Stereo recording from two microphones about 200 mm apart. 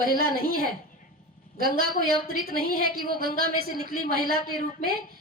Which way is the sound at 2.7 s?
45° right (ahead or behind).